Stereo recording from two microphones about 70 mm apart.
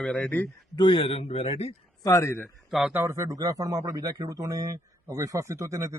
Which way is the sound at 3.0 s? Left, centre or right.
Right.